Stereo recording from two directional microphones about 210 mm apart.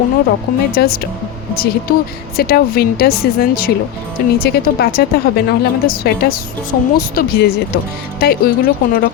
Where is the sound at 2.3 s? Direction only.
45° left (ahead or behind).